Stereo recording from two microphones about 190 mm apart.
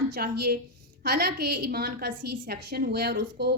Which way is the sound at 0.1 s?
55° right (ahead or behind).